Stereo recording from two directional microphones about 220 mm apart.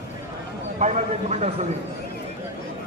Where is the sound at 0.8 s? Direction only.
30° right (ahead or behind).